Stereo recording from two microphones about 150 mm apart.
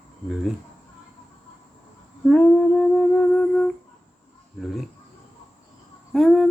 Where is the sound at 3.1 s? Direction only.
10° left (ahead or behind).